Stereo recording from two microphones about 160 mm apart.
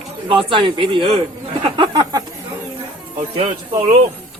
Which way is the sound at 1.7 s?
30° right (ahead or behind).